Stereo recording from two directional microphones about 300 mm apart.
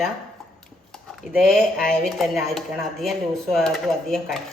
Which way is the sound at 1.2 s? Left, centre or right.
Centre.